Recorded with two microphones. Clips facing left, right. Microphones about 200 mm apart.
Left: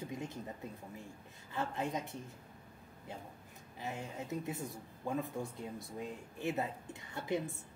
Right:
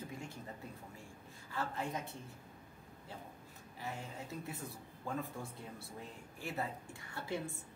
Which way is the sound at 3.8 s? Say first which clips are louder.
Left 3 dB; 20° left (ahead or behind).